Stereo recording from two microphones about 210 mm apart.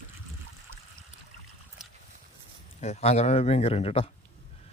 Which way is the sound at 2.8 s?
30° left (ahead or behind).